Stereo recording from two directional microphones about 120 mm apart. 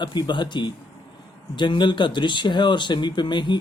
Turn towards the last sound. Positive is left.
turn(degrees=40)  # may be behind; listen again after turning